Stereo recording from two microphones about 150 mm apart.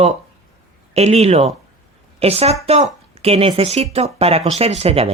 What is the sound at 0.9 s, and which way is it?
Speech, 45° right (ahead or behind).